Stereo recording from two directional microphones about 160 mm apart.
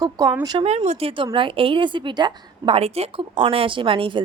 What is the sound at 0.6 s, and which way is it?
A woman's voice, 40° right (ahead or behind).